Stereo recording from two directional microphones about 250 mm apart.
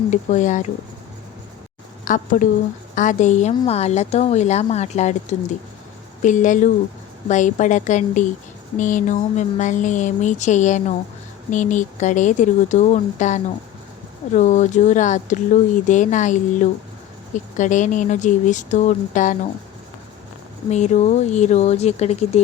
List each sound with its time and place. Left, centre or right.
0.1 s speech: left
2.0 s speech: left
6.2 s speech: left
20.7 s speech: left